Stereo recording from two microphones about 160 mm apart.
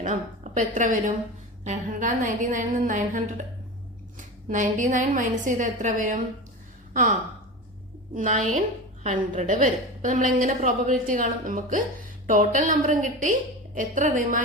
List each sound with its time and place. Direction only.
0.0 s a woman's voice: 50° right (ahead or behind)
4.4 s a woman's voice: 50° right (ahead or behind)